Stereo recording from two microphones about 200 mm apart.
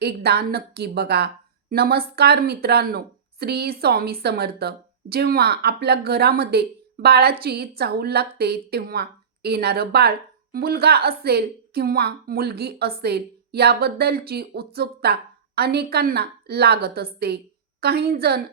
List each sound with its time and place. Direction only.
0.0 s a woman's voice: 55° right (ahead or behind)